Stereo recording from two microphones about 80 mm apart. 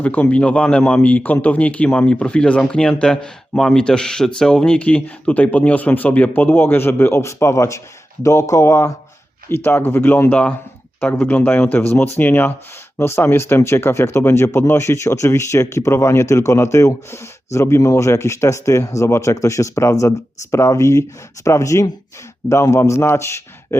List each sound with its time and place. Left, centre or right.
0.0 s speech: centre; by 9.0 s left
9.5 s speech: left